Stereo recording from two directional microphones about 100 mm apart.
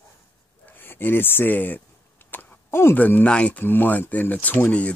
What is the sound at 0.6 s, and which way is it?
Speech, 20° left (ahead or behind).